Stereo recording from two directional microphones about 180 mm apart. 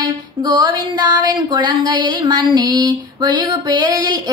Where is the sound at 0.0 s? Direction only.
25° right (ahead or behind).